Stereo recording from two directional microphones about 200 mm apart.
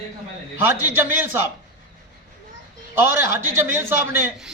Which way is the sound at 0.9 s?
10° right (ahead or behind).